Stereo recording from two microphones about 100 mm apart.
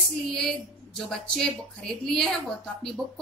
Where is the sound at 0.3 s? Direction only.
5° left (ahead or behind).